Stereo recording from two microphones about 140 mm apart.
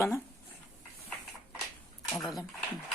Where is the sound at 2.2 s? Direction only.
Centre (ahead or behind).